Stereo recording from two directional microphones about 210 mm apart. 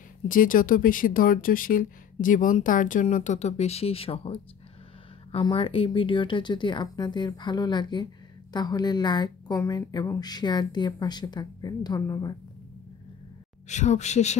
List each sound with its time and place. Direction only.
0.3 s a woman's voice: 40° left (ahead or behind); by 12.4 s 20° left (ahead or behind)
13.7 s speech: 35° left (ahead or behind)